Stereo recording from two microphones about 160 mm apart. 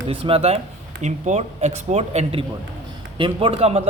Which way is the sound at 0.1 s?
35° right (ahead or behind).